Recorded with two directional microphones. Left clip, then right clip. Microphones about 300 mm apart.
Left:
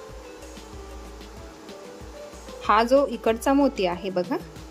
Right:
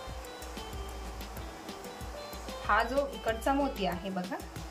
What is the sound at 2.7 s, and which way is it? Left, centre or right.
Speech, centre.